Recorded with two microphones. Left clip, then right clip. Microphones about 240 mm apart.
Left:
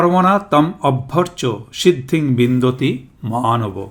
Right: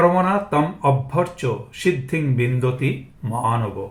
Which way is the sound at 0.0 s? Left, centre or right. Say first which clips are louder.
Left 3 dB; left.